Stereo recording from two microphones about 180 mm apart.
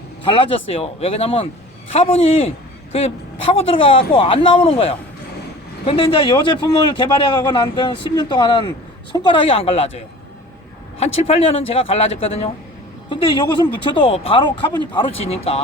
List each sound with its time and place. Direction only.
0.2 s speech: 30° left (ahead or behind)
11.0 s speech: 35° left (ahead or behind)